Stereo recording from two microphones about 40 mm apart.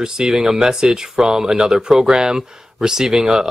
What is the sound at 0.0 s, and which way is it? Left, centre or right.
Speech, centre.